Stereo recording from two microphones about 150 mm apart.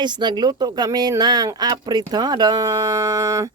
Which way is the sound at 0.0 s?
30° right (ahead or behind).